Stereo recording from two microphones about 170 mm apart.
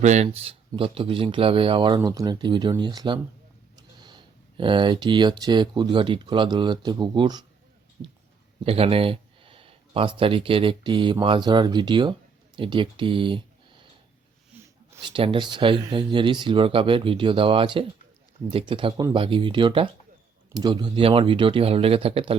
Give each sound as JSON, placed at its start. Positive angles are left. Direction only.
{"t": 0.0, "sound": "speech", "side_deg": -45}
{"t": 3.8, "sound": "a sound", "side_deg": -25}
{"t": 5.4, "sound": "speech", "side_deg": -25}
{"t": 8.6, "sound": "speech", "side_deg": -35}
{"t": 15.0, "sound": "speech", "side_deg": -30}